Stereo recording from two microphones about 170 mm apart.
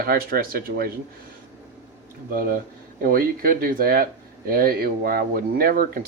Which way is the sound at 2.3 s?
55° right (ahead or behind).